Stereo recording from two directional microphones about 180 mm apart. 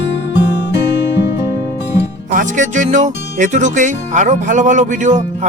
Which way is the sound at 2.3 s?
45° right (ahead or behind).